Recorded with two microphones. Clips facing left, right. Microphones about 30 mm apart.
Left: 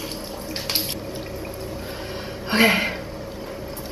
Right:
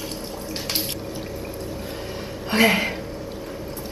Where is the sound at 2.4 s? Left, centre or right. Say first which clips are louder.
Even; left.